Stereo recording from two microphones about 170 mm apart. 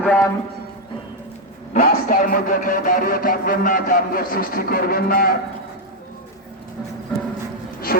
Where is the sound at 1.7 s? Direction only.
55° left (ahead or behind).